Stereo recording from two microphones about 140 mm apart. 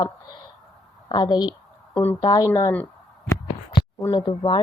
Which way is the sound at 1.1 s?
30° left (ahead or behind).